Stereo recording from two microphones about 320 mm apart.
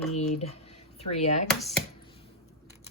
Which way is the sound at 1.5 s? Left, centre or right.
Centre.